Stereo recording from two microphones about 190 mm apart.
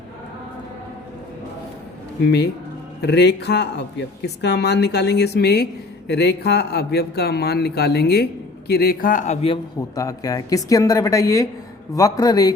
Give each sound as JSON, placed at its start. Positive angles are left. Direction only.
{"t": 2.2, "sound": "a man's voice", "side_deg": 60}
{"t": 9.9, "sound": "speech", "side_deg": 20}